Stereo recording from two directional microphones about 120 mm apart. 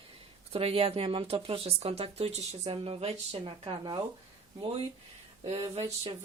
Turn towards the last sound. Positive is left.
turn(degrees=-55)  # may be behind; listen again after turning